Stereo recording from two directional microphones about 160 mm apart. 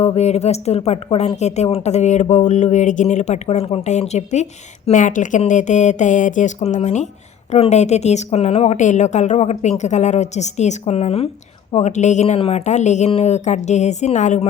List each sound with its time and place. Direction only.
0.0 s a woman's voice: 40° left (ahead or behind)